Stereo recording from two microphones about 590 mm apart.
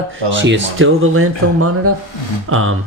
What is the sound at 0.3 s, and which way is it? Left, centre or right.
Speech, centre.